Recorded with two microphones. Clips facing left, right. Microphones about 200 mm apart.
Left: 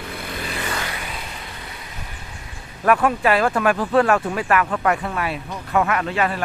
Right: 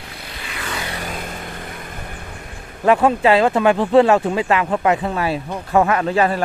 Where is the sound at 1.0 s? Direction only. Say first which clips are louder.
Right 5 dB; 50° right (ahead or behind).